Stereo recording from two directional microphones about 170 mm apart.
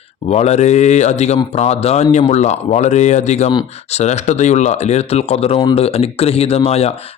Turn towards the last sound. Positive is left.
turn(degrees=40)  # may be behind; listen again after turning